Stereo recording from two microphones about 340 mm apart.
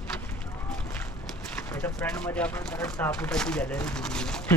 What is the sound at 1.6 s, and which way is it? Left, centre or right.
Speech, centre.